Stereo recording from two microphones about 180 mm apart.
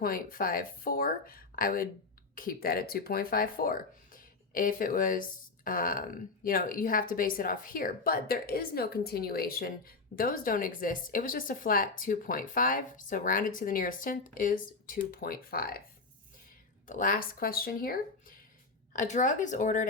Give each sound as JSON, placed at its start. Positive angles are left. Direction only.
{"t": 0.0, "sound": "speech", "side_deg": 50}
{"t": 16.8, "sound": "speech", "side_deg": 50}
{"t": 18.9, "sound": "speech", "side_deg": 45}